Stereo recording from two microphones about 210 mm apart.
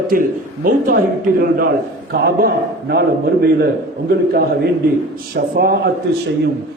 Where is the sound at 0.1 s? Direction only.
40° right (ahead or behind).